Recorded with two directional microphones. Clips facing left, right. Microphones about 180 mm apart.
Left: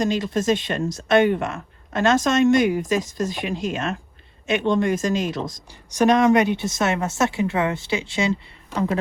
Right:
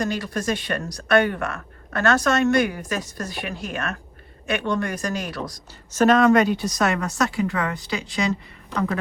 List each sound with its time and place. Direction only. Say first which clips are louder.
0.0 s a woman's voice: left 4 dB; 20° left (ahead or behind)